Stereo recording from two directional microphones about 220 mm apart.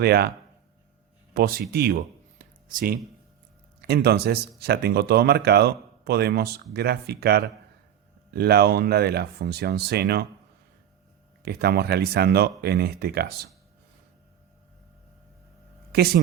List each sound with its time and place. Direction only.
0.0 s speech: 45° right (ahead or behind)
1.3 s speech: 45° right (ahead or behind)
2.4 s a sound: 40° right (ahead or behind)
3.8 s speech: 45° right (ahead or behind)
11.4 s speech: 45° right (ahead or behind)
15.9 s speech: 45° right (ahead or behind)